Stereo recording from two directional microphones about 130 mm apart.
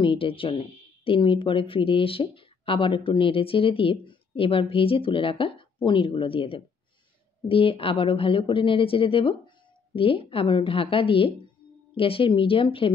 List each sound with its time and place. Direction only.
0.0 s speech: 40° left (ahead or behind)